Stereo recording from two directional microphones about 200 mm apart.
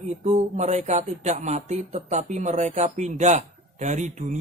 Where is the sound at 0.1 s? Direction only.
35° right (ahead or behind).